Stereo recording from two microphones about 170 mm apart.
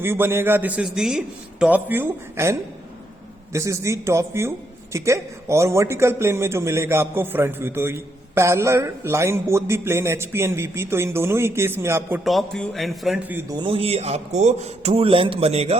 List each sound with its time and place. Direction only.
0.0 s a woman's voice: 15° right (ahead or behind)
12.2 s speech: centre (ahead or behind)
13.6 s speech: 35° right (ahead or behind)